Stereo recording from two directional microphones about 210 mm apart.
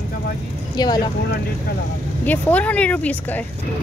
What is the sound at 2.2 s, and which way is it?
Speech, 10° left (ahead or behind).